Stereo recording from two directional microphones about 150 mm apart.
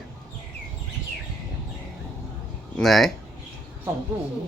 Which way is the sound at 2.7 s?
Centre (ahead or behind).